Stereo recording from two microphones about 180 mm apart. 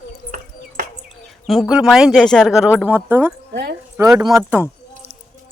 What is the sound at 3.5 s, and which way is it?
Speech, 65° right (ahead or behind).